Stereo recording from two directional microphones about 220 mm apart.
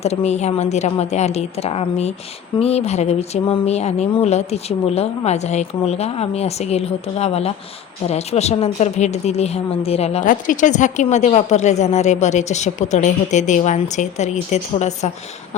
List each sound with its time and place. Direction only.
0.0 s a woman's voice: 30° left (ahead or behind)